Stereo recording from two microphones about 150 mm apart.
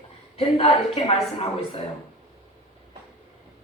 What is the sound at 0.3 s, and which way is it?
Speech, 40° left (ahead or behind).